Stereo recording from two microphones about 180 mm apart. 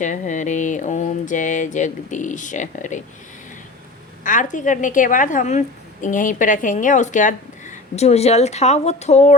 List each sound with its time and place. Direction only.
0.0 s a woman's voice: 45° left (ahead or behind)
4.2 s a woman's voice: 45° left (ahead or behind)